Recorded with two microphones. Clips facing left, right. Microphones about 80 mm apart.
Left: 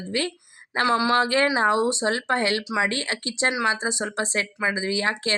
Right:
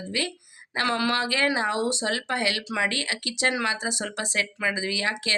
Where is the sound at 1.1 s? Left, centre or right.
Left.